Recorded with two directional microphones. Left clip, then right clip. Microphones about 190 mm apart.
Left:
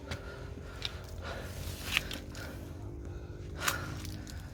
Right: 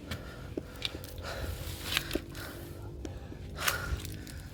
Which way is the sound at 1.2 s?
15° right (ahead or behind).